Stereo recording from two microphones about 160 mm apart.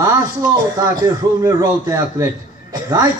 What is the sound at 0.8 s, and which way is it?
Speech, 20° right (ahead or behind).